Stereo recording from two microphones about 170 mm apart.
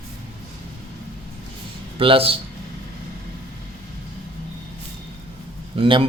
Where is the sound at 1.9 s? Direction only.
30° right (ahead or behind).